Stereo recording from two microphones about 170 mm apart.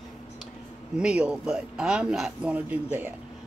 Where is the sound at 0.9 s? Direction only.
5° right (ahead or behind).